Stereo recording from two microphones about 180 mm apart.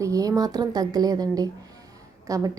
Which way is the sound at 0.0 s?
20° right (ahead or behind).